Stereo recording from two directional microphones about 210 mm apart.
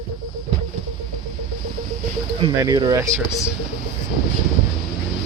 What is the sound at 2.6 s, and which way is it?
Speech, 20° right (ahead or behind).